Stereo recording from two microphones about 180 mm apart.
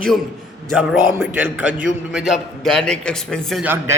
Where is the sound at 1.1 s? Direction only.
10° right (ahead or behind).